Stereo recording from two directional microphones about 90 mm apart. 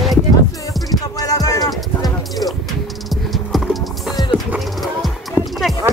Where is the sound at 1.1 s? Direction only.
40° left (ahead or behind).